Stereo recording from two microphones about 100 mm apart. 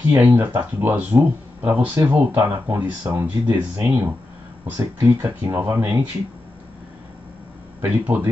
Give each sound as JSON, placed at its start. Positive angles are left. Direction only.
{"t": 0.1, "sound": "speech", "side_deg": -20}
{"t": 7.8, "sound": "speech", "side_deg": -20}